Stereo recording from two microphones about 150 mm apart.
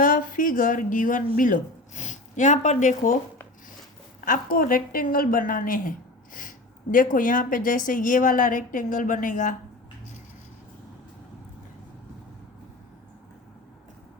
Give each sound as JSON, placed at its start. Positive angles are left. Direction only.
{"t": 0.0, "sound": "a woman's voice", "side_deg": 65}
{"t": 4.3, "sound": "a woman's voice", "side_deg": 70}
{"t": 6.9, "sound": "a woman's voice", "side_deg": 65}